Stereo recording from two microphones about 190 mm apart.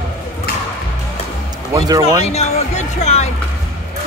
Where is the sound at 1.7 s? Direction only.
20° right (ahead or behind).